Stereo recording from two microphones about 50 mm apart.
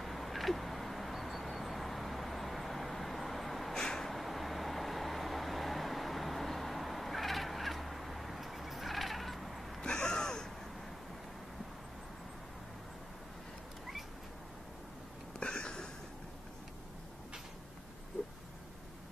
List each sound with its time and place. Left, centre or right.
0.0 s vehicle: centre
9.8 s gasp: centre
15.3 s a sound: centre